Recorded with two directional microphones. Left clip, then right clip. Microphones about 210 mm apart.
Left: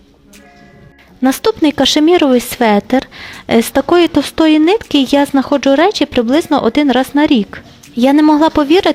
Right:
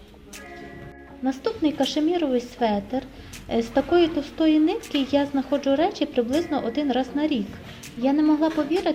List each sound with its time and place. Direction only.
1.2 s a woman's voice: 50° left (ahead or behind)